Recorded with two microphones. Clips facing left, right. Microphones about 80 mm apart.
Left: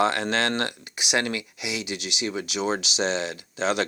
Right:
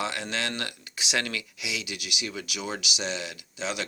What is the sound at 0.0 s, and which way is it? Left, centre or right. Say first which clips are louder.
Speech: left 8 dB; left.